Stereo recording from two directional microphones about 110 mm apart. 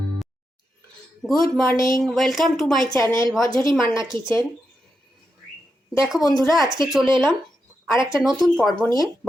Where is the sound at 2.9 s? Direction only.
30° left (ahead or behind).